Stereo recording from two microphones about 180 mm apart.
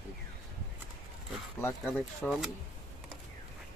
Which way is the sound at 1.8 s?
5° left (ahead or behind).